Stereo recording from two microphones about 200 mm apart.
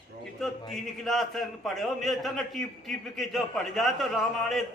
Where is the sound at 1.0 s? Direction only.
Centre (ahead or behind).